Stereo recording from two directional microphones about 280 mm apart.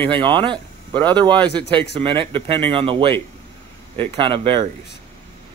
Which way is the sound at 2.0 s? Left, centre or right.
Centre.